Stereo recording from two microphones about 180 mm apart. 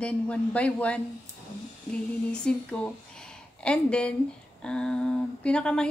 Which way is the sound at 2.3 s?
5° left (ahead or behind).